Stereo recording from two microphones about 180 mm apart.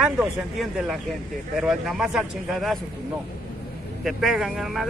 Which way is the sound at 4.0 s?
Centre (ahead or behind).